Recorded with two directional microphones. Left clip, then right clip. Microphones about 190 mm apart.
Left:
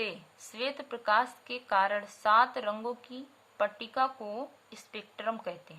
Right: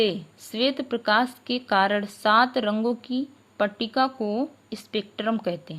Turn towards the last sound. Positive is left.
turn(degrees=-30)  # may be behind; listen again after turning